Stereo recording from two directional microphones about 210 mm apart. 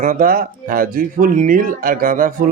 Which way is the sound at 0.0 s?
40° right (ahead or behind).